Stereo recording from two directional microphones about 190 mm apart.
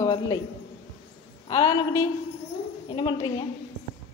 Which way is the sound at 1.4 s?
20° left (ahead or behind).